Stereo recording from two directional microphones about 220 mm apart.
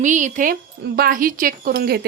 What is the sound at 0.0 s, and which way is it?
A woman's voice, 35° right (ahead or behind).